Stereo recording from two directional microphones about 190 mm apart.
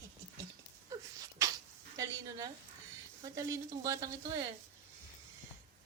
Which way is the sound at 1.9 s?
20° right (ahead or behind).